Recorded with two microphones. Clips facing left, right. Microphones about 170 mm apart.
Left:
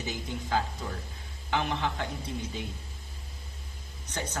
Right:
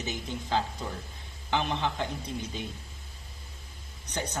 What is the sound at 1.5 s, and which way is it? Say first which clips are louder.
A man's voice: right 1 dB; 20° right (ahead or behind).